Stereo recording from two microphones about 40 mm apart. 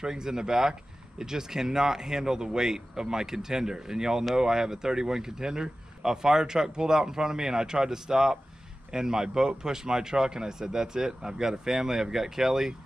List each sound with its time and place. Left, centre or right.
0.0 s speech: centre